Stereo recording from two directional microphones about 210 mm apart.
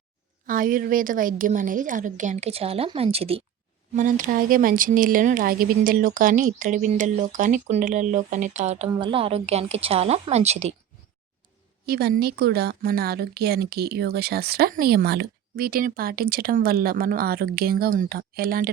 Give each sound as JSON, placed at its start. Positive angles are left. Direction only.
{"t": 0.4, "sound": "speech", "side_deg": -40}
{"t": 3.9, "sound": "a woman's voice", "side_deg": -40}
{"t": 11.9, "sound": "speech", "side_deg": -50}